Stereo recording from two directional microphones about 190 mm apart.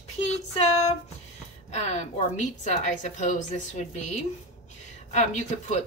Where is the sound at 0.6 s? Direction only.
35° left (ahead or behind).